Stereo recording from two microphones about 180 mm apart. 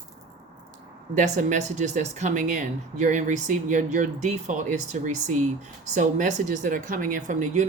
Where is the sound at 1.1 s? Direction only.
40° right (ahead or behind).